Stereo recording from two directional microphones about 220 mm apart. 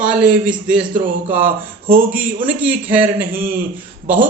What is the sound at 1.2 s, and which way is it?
Speech, 40° right (ahead or behind).